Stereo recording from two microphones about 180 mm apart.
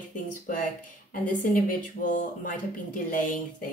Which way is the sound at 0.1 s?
45° left (ahead or behind).